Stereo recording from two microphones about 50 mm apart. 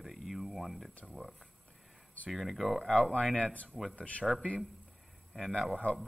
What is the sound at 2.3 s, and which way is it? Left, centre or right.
Speech, centre.